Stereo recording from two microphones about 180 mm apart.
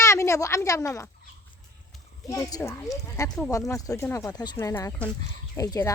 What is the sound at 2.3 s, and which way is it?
Speech, 20° left (ahead or behind).